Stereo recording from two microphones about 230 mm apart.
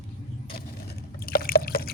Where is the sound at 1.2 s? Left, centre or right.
Left.